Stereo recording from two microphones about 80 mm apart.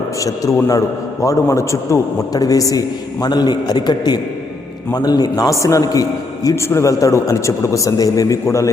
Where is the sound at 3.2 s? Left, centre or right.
Left.